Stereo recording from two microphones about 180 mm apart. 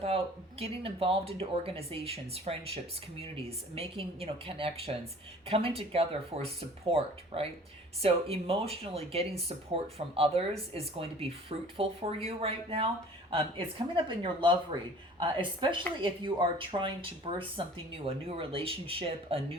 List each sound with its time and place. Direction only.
0.6 s a woman's voice: 30° right (ahead or behind)